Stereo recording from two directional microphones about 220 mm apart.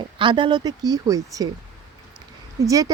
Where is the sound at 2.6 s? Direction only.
15° right (ahead or behind).